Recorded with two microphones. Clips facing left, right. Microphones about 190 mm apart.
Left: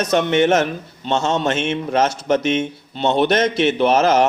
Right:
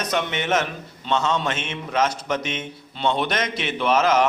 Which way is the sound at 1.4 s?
45° left (ahead or behind).